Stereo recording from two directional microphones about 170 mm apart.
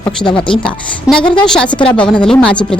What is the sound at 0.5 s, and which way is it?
Speech, 30° left (ahead or behind).